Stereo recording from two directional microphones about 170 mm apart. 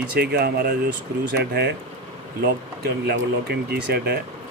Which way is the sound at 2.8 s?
70° right (ahead or behind).